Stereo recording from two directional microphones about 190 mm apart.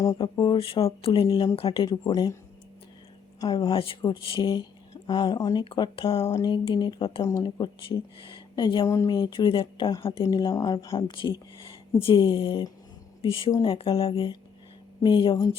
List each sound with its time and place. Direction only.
0.0 s speech: 20° left (ahead or behind)
3.4 s speech: 20° left (ahead or behind)